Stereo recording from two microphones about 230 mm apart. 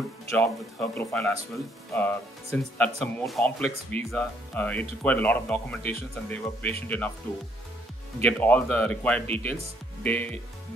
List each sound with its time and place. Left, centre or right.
0.3 s speech: centre
5.8 s speech: right
6.2 s speech: centre
8.2 s speech: centre